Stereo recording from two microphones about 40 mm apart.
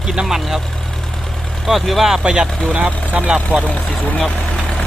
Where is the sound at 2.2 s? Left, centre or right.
Centre.